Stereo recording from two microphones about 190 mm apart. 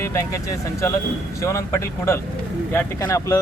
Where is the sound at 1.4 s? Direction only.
15° left (ahead or behind).